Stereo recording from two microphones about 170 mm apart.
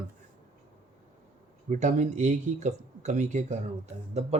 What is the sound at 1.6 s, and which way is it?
Speech, 45° right (ahead or behind).